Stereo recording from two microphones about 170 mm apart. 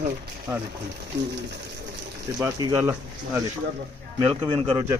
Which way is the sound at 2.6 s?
15° right (ahead or behind).